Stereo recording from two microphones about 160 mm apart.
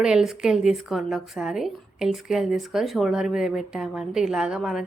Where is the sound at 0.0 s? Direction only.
5° right (ahead or behind).